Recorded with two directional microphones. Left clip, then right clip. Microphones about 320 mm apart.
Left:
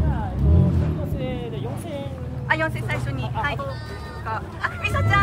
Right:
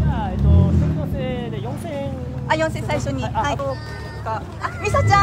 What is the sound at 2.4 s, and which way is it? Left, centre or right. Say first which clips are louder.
Speech: right 3 dB; centre.